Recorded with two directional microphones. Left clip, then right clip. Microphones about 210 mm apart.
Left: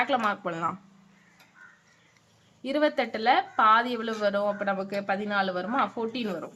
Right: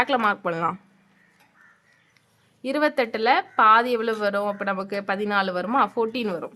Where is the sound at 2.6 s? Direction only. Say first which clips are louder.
Right 3 dB; 35° right (ahead or behind).